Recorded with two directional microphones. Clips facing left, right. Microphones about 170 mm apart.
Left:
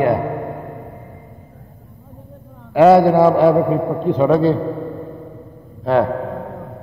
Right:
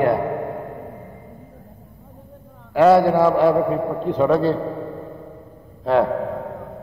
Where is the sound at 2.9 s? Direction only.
20° left (ahead or behind).